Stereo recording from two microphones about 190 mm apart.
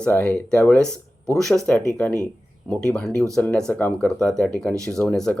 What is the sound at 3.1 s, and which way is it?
Speech, 15° right (ahead or behind).